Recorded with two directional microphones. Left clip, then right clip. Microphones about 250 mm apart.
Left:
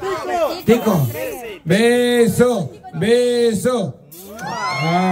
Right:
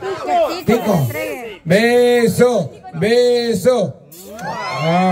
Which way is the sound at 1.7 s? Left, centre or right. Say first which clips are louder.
Right 3 dB; centre.